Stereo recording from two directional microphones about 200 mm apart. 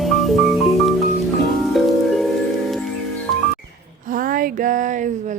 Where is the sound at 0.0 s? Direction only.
Centre (ahead or behind).